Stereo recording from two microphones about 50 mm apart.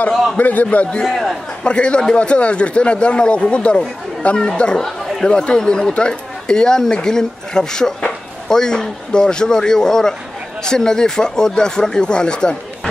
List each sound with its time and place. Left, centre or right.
0.4 s a man's voice: left
0.7 s speech: left
1.0 s a man's voice: centre
1.6 s speech: left